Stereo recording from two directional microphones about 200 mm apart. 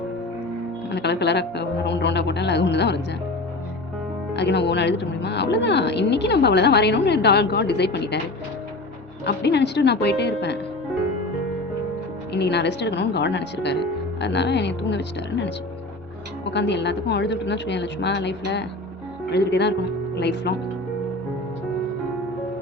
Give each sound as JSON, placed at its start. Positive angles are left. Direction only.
{"t": 0.9, "sound": "a woman's voice", "side_deg": 60}
{"t": 4.4, "sound": "a woman's voice", "side_deg": 60}
{"t": 9.2, "sound": "a woman's voice", "side_deg": 55}
{"t": 12.3, "sound": "a woman's voice", "side_deg": 55}